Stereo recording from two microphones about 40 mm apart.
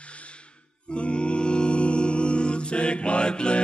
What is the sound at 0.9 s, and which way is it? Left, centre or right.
Music, left.